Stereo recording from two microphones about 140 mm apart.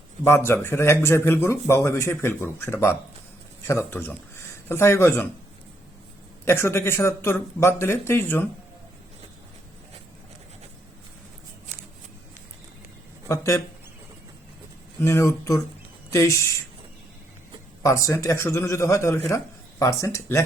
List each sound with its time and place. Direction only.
0.3 s speech: 20° left (ahead or behind)
6.4 s speech: 20° left (ahead or behind)
13.2 s speech: 20° left (ahead or behind)
15.0 s a man's voice: 20° left (ahead or behind)
17.8 s a man's voice: 20° left (ahead or behind)